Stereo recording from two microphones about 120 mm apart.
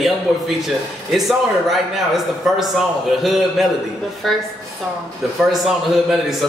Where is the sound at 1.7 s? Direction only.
Centre (ahead or behind).